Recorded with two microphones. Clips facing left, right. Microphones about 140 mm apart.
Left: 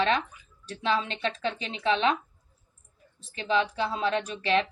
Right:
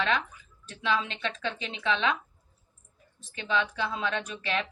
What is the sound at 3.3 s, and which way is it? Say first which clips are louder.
Speech: left 3 dB; 35° left (ahead or behind).